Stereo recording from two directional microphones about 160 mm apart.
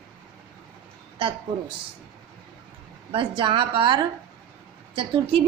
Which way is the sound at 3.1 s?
30° right (ahead or behind).